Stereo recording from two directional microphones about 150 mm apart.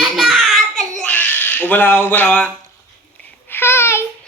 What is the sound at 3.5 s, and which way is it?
Babbling, 15° left (ahead or behind).